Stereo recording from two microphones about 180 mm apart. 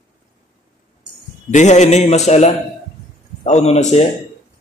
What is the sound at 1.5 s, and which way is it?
A man's voice, 40° left (ahead or behind).